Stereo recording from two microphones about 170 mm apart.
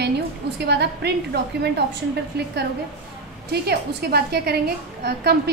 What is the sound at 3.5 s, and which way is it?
A woman's voice, 70° right (ahead or behind).